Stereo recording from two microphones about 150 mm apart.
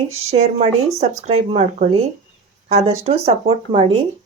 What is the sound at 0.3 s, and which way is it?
Speech, 45° right (ahead or behind).